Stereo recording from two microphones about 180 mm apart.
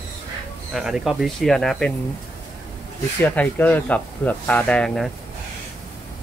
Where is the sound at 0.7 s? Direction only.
5° right (ahead or behind).